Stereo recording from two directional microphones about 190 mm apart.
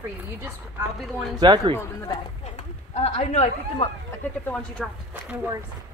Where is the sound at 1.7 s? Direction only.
15° left (ahead or behind).